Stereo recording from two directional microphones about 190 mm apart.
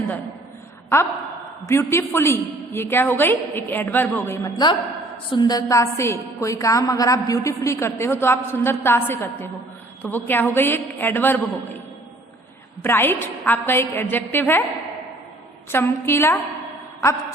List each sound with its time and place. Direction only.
1.6 s a woman's voice: 15° left (ahead or behind)
12.8 s a woman's voice: 10° left (ahead or behind)
15.7 s a woman's voice: 15° left (ahead or behind)